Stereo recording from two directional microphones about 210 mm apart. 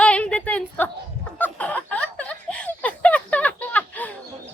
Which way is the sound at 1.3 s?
5° left (ahead or behind).